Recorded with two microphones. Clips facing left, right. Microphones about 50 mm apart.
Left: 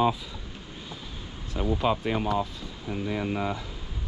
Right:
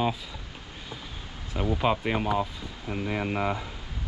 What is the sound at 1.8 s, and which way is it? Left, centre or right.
Speech, centre.